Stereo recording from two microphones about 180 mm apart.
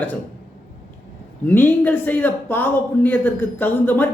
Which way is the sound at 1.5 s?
10° left (ahead or behind).